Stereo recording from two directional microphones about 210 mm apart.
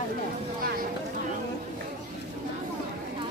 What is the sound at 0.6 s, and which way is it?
Speech, 45° right (ahead or behind).